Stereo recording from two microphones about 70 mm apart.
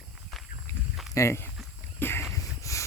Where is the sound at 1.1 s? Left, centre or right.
Left.